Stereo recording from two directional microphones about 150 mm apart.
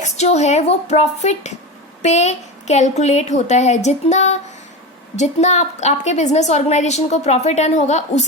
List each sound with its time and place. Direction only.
0.0 s a woman's voice: 50° left (ahead or behind)